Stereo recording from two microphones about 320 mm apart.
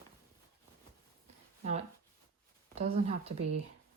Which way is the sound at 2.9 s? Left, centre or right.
Centre.